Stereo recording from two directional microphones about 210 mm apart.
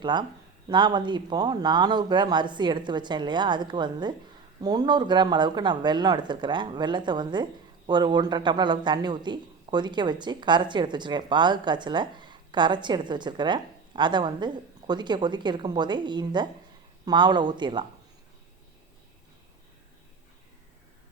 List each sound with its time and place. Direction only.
0.0 s speech: 20° right (ahead or behind)